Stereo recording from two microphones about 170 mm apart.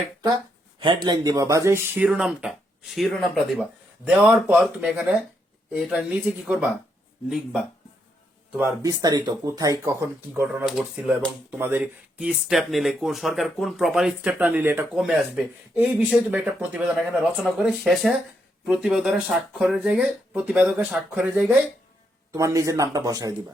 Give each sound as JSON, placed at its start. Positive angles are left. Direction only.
{"t": 0.8, "sound": "speech", "side_deg": -25}
{"t": 8.5, "sound": "speech", "side_deg": -15}
{"t": 22.3, "sound": "speech", "side_deg": -20}